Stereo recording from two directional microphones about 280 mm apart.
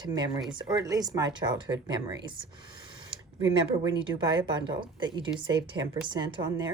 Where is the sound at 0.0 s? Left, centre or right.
Centre.